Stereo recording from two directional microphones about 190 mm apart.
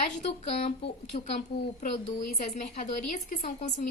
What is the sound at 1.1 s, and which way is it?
Speech, 25° left (ahead or behind).